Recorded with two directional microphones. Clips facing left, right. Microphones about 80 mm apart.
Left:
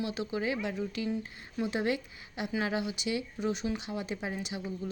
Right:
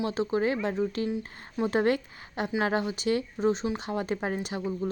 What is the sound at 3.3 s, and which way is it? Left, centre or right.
Speech, right.